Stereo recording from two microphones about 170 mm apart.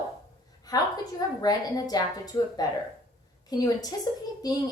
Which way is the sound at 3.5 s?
20° left (ahead or behind).